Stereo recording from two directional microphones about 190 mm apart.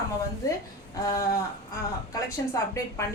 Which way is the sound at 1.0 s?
20° left (ahead or behind).